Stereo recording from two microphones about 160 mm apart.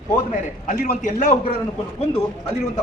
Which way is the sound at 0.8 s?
55° left (ahead or behind).